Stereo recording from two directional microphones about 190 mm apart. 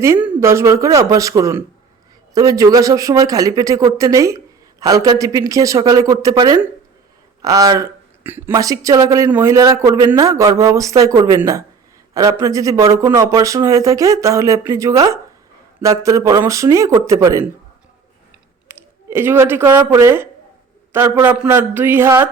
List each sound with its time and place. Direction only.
0.3 s speech: 15° right (ahead or behind)
18.7 s speech: 10° right (ahead or behind)